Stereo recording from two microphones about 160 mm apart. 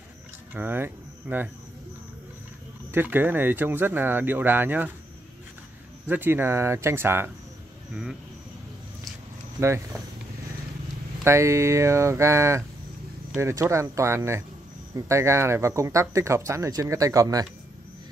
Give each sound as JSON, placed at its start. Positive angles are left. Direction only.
{"t": 0.6, "sound": "speech", "side_deg": -15}
{"t": 2.9, "sound": "speech", "side_deg": -15}
{"t": 6.0, "sound": "speech", "side_deg": -15}
{"t": 7.9, "sound": "speech", "side_deg": -5}
{"t": 11.2, "sound": "speech", "side_deg": -15}